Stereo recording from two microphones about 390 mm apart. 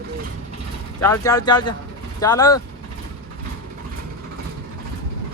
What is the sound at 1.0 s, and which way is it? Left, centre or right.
Speech, centre.